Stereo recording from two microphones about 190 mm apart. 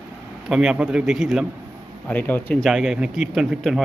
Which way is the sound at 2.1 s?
10° left (ahead or behind).